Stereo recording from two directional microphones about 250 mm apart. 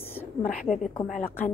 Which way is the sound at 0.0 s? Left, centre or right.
Centre.